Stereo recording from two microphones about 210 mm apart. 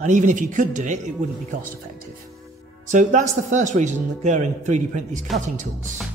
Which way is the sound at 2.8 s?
35° right (ahead or behind).